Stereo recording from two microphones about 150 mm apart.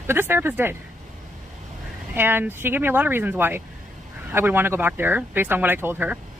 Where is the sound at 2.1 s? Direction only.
15° right (ahead or behind).